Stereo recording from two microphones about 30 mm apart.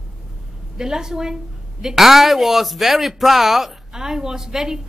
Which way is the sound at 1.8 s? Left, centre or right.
Centre.